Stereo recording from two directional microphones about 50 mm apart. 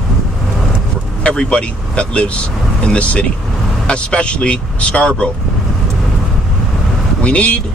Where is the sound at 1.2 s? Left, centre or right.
Centre.